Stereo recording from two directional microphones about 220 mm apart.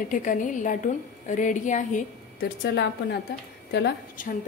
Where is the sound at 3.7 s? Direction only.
45° left (ahead or behind).